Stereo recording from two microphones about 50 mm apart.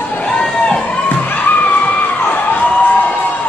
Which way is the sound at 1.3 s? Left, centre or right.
Left.